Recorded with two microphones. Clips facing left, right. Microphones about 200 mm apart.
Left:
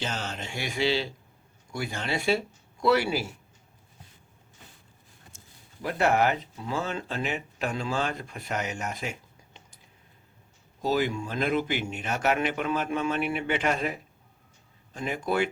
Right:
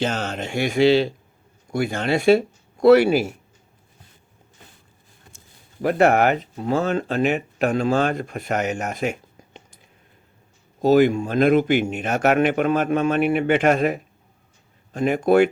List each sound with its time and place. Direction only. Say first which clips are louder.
0.0 s speech: right 9 dB; 65° right (ahead or behind)
5.8 s speech: right 7 dB; 60° right (ahead or behind)
10.8 s speech: right 11 dB; 60° right (ahead or behind)